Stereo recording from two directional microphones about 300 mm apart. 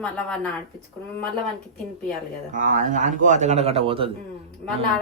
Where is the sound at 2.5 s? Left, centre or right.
Right.